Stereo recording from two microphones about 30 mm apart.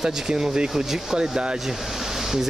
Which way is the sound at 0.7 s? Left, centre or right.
Centre.